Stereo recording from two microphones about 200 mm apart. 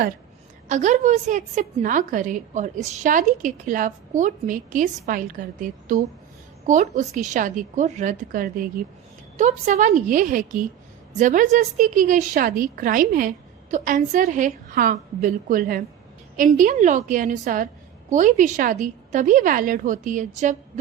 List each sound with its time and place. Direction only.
0.7 s a woman's voice: 40° right (ahead or behind)